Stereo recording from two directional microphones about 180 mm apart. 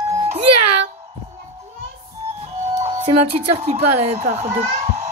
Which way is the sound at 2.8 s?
30° right (ahead or behind).